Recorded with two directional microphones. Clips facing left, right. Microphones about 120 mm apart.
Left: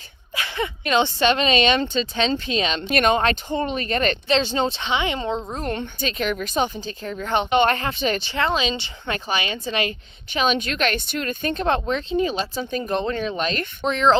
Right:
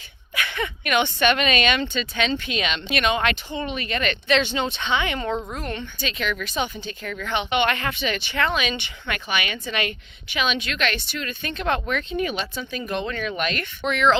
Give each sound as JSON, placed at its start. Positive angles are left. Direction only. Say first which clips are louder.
{"t": 0.3, "sound": "a woman's voice", "louder": "left 1 dB", "side_deg": 25}
{"t": 5.5, "sound": "a woman's voice", "louder": "left 4 dB", "side_deg": 45}
{"t": 8.4, "sound": "a woman's voice", "louder": "even", "side_deg": 25}